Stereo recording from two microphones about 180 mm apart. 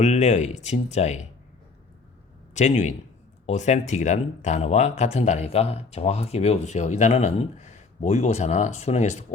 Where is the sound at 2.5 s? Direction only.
40° left (ahead or behind).